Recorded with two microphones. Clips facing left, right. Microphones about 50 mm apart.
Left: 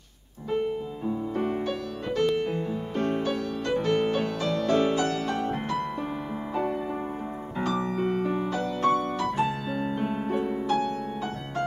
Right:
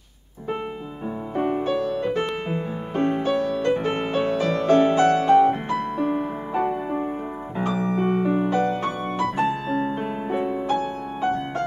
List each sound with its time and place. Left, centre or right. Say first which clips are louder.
1.0 s music: right 4 dB; right
4.5 s music: right 5 dB; right
7.6 s music: right 3 dB; centre
7.9 s music: right 5 dB; right
9.5 s music: right 5 dB; centre